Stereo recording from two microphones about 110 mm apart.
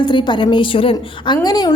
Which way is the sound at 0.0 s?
45° left (ahead or behind).